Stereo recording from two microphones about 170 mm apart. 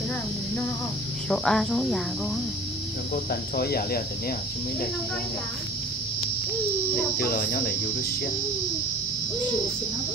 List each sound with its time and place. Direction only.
1.3 s speech: centre (ahead or behind)
3.3 s speech: 65° left (ahead or behind)
7.2 s speech: 60° left (ahead or behind)